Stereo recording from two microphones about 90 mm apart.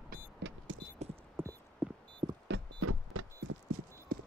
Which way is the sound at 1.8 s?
15° right (ahead or behind).